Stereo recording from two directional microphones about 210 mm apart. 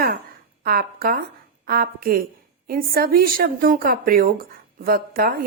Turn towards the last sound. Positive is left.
turn(degrees=-45)  # may be behind; listen again after turning